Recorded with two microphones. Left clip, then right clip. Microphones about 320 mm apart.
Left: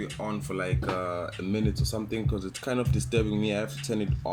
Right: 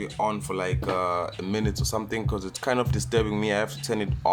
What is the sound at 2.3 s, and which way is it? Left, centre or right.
Speech, right.